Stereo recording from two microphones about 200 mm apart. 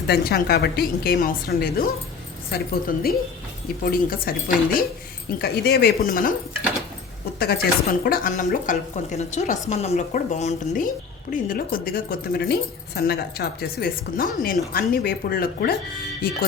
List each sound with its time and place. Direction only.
0.1 s a woman's voice: 50° left (ahead or behind)
7.3 s a woman's voice: 50° left (ahead or behind)